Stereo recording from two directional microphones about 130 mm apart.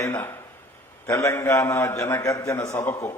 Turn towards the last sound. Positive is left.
turn(degrees=20)  # may be behind; listen again after turning